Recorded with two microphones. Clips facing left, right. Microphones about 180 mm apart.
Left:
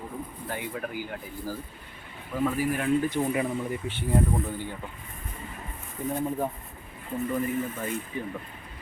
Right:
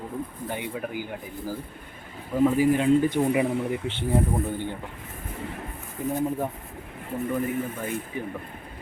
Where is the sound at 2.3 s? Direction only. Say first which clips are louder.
Right 6 dB; 15° right (ahead or behind).